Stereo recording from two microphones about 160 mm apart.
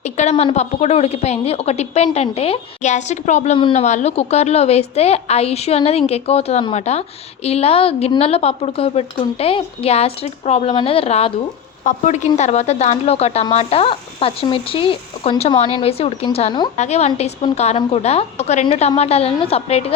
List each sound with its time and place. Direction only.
0.0 s a sound: 45° left (ahead or behind)
0.5 s a woman's voice: 45° left (ahead or behind)
11.8 s a woman's voice: 50° left (ahead or behind)
16.7 s a woman's voice: 45° left (ahead or behind)